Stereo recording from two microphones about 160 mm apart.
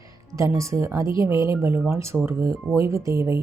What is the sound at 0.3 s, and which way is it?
Speech, 20° right (ahead or behind).